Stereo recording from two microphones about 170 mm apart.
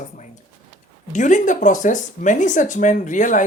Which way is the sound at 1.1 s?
45° left (ahead or behind).